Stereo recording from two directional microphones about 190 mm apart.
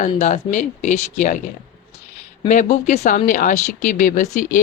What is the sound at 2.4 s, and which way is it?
Speech, 40° left (ahead or behind).